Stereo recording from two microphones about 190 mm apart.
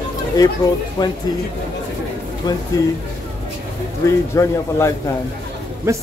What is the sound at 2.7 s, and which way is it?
Speech, 20° left (ahead or behind).